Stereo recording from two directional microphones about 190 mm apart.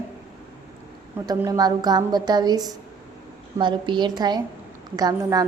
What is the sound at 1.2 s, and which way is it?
A woman's voice, 15° right (ahead or behind).